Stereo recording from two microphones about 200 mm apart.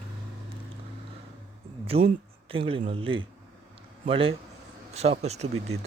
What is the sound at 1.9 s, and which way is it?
Speech, 30° right (ahead or behind).